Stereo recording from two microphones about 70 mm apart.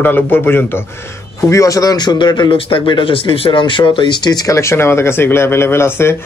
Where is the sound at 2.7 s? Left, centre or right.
Left.